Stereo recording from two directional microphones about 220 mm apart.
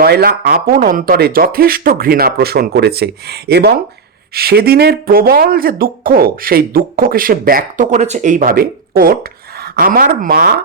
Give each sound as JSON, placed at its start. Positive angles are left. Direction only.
{"t": 0.0, "sound": "speech", "side_deg": -45}